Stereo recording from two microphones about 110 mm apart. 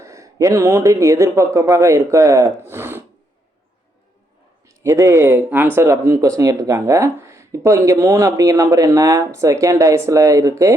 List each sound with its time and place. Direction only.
0.0 s speech: 30° right (ahead or behind)
4.8 s speech: 25° right (ahead or behind)